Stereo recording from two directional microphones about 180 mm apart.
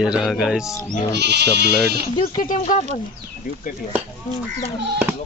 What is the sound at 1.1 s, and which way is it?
Speech, 70° right (ahead or behind).